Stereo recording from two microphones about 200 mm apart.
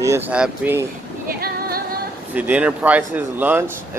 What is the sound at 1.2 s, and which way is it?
Female singing, 50° right (ahead or behind).